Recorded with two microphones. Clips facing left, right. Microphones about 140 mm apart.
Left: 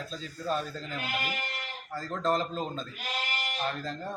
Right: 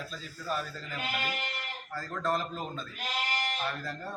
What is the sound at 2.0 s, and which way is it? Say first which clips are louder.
Speech: left 3 dB; 20° left (ahead or behind).